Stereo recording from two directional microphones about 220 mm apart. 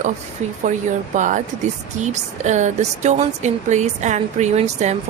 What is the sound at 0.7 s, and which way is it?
A woman's voice, 35° right (ahead or behind).